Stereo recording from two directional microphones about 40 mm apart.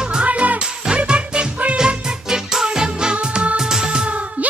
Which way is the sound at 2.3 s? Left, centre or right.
Centre.